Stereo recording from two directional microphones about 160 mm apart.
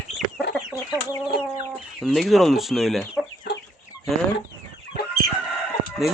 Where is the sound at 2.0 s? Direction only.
Centre (ahead or behind).